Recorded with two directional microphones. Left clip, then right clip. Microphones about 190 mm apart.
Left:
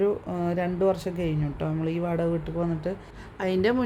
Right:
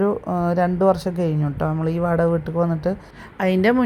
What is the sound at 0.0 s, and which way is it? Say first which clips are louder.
A woman's voice: right 5 dB; 25° right (ahead or behind).